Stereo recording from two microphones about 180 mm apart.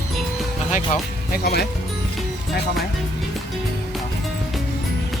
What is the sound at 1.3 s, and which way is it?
Speech, 60° left (ahead or behind).